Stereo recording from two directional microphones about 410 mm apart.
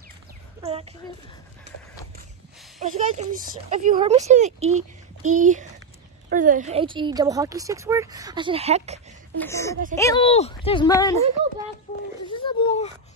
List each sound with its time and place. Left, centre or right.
0.6 s a sound: centre
3.0 s speech: centre
9.4 s speech: centre
12.3 s speech: centre